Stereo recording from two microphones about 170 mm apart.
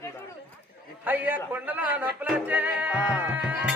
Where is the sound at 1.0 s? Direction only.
10° right (ahead or behind).